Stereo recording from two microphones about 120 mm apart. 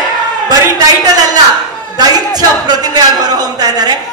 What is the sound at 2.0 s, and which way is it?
Speech, 35° right (ahead or behind).